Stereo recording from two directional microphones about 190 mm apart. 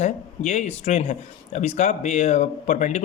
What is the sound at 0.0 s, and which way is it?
A man's voice, 35° left (ahead or behind).